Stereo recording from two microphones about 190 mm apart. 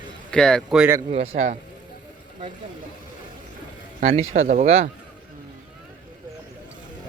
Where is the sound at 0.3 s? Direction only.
5° left (ahead or behind).